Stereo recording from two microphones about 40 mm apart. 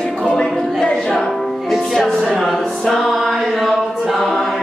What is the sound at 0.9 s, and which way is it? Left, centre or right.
Music, centre.